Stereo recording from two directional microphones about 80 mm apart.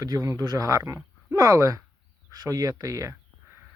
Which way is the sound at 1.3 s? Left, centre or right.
Right.